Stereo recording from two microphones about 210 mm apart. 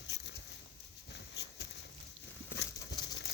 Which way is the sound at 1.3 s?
55° left (ahead or behind).